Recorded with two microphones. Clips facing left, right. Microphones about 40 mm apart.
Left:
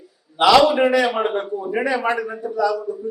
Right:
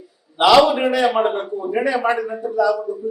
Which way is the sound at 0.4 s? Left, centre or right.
Right.